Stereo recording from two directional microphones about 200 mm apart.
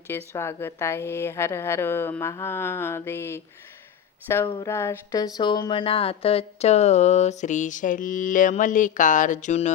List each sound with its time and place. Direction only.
0.1 s a woman's voice: 10° left (ahead or behind)
4.4 s speech: 25° left (ahead or behind)
4.7 s speech: 15° left (ahead or behind); by 9.7 s 35° left (ahead or behind)